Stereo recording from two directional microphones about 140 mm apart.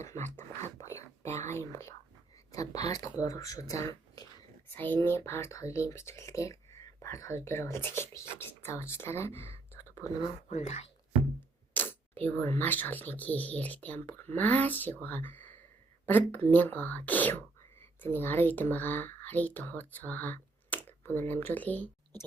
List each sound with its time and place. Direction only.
0.0 s whispering: 20° left (ahead or behind)
2.5 s speech: 25° left (ahead or behind)
10.5 s speech: 50° left (ahead or behind)
11.7 s speech: 15° left (ahead or behind)